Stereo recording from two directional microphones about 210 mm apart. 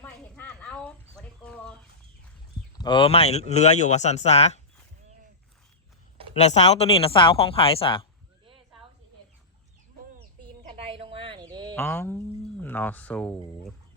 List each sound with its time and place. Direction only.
0.0 s chicken: 5° left (ahead or behind)
2.7 s speech: 20° left (ahead or behind)
6.4 s speech: 30° left (ahead or behind)
10.7 s a sound: 25° right (ahead or behind)
11.7 s speech: 5° left (ahead or behind)